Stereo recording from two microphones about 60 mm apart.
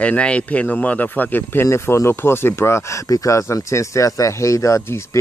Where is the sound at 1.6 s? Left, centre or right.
Left.